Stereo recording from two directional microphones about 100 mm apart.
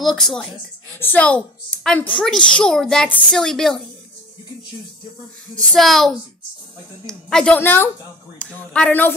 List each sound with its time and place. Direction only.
0.0 s speech: centre (ahead or behind)
0.9 s a woman's voice: 15° left (ahead or behind)
5.6 s speech: 5° left (ahead or behind)
7.5 s a woman's voice: 20° left (ahead or behind)